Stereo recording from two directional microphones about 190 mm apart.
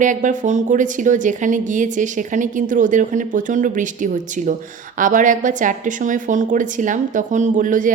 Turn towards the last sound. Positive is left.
turn(degrees=-45)  # may be behind; listen again after turning